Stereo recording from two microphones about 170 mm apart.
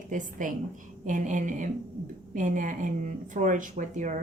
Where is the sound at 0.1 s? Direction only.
50° right (ahead or behind).